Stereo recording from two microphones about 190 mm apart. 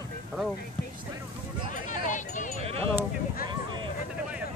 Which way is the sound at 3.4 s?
25° right (ahead or behind).